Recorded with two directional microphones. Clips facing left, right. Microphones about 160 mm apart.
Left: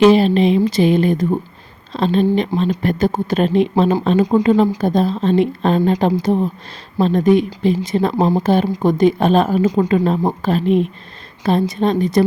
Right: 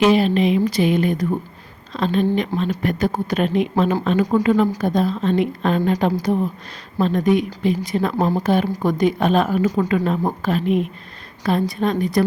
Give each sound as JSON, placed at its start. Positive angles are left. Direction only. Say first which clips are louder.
{"t": 0.0, "sound": "speech", "louder": "left 4 dB", "side_deg": 30}